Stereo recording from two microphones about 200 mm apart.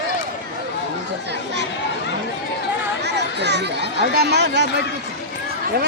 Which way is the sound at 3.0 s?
60° right (ahead or behind).